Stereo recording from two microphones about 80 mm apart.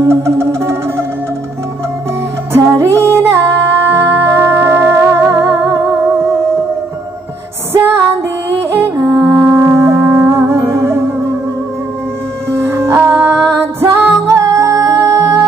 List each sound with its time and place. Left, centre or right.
0.1 s music: right
2.5 s music: right
7.7 s music: right
12.6 s music: right